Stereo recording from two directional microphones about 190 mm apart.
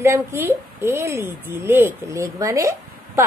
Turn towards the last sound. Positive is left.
turn(degrees=-15)  # may be behind; listen again after turning